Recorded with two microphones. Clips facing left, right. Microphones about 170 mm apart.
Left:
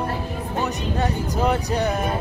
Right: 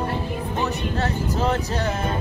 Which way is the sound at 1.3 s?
15° left (ahead or behind).